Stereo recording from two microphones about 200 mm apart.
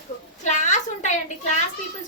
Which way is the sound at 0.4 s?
35° left (ahead or behind).